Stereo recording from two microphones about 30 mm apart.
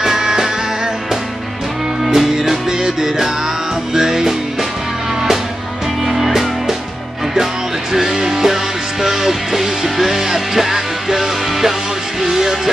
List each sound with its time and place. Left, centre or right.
0.0 s music: centre
2.0 s music: centre
7.9 s music: centre